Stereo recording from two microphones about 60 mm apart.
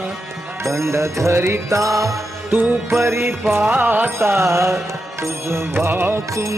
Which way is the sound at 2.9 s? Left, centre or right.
Right.